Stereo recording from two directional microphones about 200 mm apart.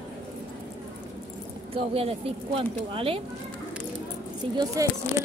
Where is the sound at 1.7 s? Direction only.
30° right (ahead or behind).